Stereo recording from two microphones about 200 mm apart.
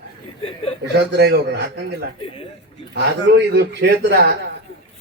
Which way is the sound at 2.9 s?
55° right (ahead or behind).